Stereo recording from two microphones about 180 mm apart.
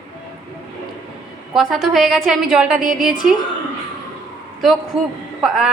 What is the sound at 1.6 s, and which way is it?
A woman's voice, centre (ahead or behind).